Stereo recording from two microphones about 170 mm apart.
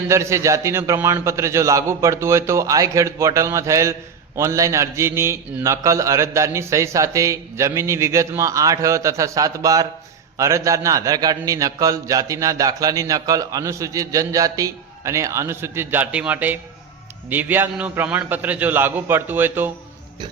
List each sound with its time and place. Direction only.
0.1 s a man's voice: 15° right (ahead or behind)